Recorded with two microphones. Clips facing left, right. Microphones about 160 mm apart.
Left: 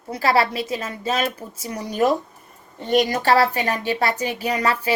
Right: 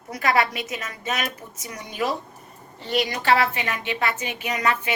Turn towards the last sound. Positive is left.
turn(degrees=35)  # may be behind; listen again after turning